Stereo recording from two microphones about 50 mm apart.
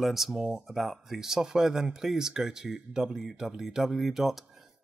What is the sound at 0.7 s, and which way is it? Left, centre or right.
Speech, centre.